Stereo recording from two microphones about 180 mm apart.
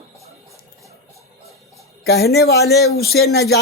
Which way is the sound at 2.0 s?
60° left (ahead or behind).